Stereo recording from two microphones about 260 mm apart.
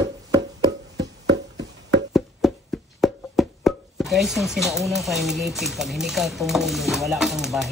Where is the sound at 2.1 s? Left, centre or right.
Centre.